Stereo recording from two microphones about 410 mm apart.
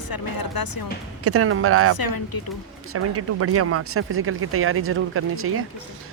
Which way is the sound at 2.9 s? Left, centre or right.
Right.